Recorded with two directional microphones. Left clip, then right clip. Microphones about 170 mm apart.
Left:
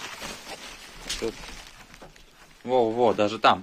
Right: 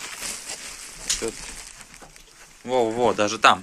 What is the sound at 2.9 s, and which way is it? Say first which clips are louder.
Speech: right 1 dB; 10° left (ahead or behind).